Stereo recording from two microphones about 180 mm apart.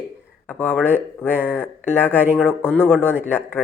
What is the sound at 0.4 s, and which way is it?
Speech, 10° left (ahead or behind).